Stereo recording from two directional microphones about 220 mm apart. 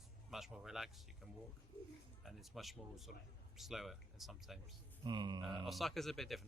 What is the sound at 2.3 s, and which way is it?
Speech, centre (ahead or behind).